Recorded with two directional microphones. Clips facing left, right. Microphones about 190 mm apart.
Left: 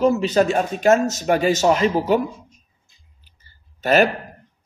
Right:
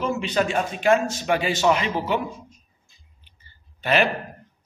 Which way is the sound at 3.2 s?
40° left (ahead or behind).